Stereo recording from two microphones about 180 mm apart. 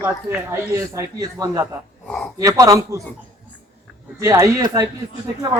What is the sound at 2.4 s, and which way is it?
Speech, 20° right (ahead or behind).